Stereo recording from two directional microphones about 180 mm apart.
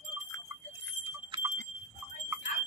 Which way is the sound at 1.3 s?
25° right (ahead or behind).